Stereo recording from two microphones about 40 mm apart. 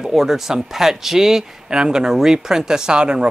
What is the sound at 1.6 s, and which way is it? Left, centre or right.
Speech, right.